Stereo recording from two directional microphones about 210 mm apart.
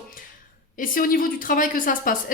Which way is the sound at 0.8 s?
40° left (ahead or behind).